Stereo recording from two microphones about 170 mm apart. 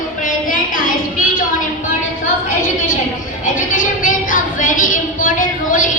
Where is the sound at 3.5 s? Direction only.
50° left (ahead or behind).